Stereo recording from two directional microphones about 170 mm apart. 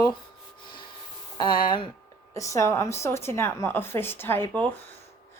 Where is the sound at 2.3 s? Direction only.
15° left (ahead or behind).